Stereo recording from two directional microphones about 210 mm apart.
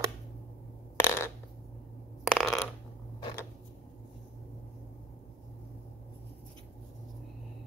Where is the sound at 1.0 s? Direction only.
10° left (ahead or behind).